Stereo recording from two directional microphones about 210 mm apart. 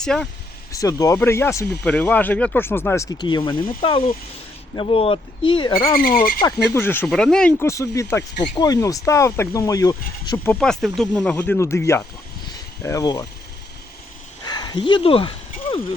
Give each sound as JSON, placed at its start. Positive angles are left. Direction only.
{"t": 0.0, "sound": "speech", "side_deg": 5}
{"t": 0.7, "sound": "speech", "side_deg": 15}
{"t": 6.0, "sound": "speech", "side_deg": 45}
{"t": 6.4, "sound": "speech", "side_deg": 10}
{"t": 14.4, "sound": "a sound", "side_deg": 20}